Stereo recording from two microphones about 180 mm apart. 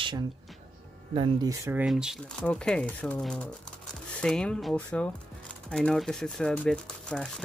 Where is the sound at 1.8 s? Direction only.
Centre (ahead or behind).